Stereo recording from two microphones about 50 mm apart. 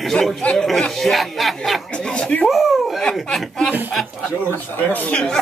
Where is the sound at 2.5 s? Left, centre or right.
Centre.